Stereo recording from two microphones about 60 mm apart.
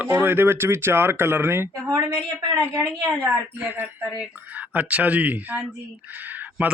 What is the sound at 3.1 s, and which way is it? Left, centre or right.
Speech, right.